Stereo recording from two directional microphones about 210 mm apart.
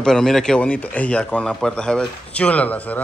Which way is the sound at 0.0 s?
Centre (ahead or behind).